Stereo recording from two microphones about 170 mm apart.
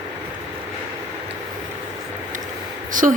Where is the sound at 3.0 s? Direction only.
50° right (ahead or behind).